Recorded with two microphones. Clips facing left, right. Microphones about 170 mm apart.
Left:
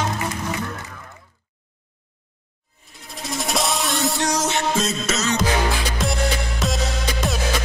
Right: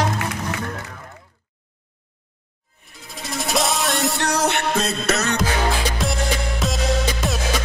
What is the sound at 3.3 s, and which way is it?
Music, centre (ahead or behind).